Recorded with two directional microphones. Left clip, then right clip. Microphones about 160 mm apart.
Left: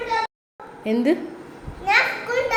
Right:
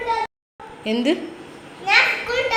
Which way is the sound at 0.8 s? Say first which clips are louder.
Even; 15° left (ahead or behind).